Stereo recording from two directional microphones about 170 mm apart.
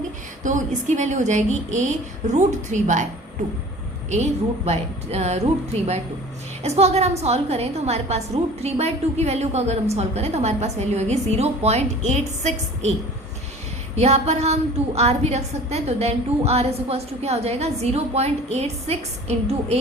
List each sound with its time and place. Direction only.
0.4 s a woman's voice: 45° right (ahead or behind)
4.1 s a woman's voice: 40° right (ahead or behind)
13.9 s a woman's voice: 40° right (ahead or behind)